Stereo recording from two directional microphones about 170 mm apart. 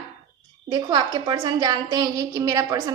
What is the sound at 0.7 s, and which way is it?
A woman's voice, 25° right (ahead or behind).